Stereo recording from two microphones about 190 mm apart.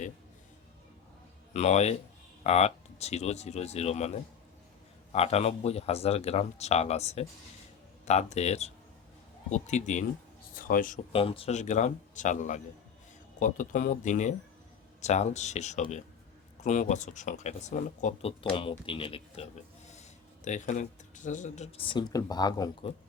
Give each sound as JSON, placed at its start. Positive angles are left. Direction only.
{"t": 1.5, "sound": "speech", "side_deg": 35}
{"t": 5.1, "sound": "speech", "side_deg": 35}
{"t": 11.1, "sound": "speech", "side_deg": 30}